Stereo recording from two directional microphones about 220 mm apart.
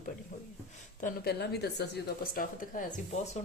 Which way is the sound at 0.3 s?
35° left (ahead or behind).